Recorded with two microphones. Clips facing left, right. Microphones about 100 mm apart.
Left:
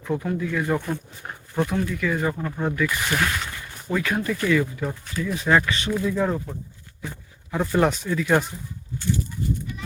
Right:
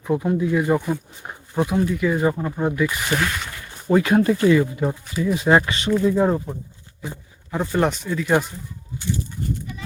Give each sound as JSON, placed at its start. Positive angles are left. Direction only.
{"t": 0.0, "sound": "speech", "side_deg": -15}
{"t": 0.6, "sound": "speech", "side_deg": -5}
{"t": 3.2, "sound": "speech", "side_deg": 0}
{"t": 3.8, "sound": "speech", "side_deg": -30}
{"t": 7.5, "sound": "speech", "side_deg": 0}
{"t": 9.0, "sound": "speech", "side_deg": -15}